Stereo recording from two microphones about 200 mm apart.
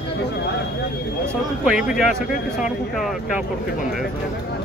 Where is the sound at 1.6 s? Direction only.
5° right (ahead or behind).